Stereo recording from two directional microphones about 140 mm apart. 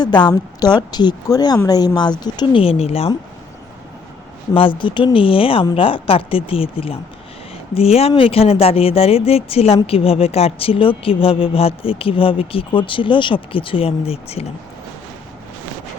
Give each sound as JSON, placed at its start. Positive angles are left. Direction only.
{"t": 0.0, "sound": "speech", "side_deg": 30}
{"t": 4.8, "sound": "speech", "side_deg": 35}